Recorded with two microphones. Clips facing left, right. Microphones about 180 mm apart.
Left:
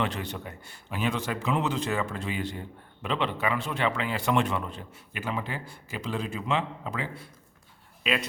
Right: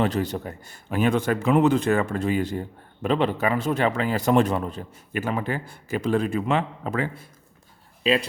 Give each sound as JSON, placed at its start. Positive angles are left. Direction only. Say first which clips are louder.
{"t": 0.0, "sound": "a man's voice", "louder": "right 7 dB", "side_deg": -40}
{"t": 8.0, "sound": "speech", "louder": "right 7 dB", "side_deg": -30}